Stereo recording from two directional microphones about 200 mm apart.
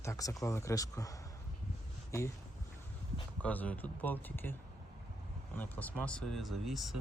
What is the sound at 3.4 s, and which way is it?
Speech, 5° left (ahead or behind).